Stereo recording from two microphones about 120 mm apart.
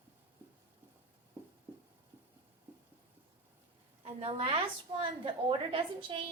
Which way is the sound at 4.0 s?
55° right (ahead or behind).